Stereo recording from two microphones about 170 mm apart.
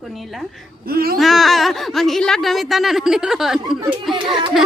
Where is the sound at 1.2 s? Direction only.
Centre (ahead or behind).